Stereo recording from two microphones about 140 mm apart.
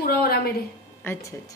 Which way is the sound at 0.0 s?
90° left.